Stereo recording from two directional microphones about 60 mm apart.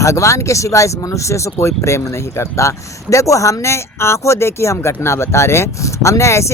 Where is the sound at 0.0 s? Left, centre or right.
Left.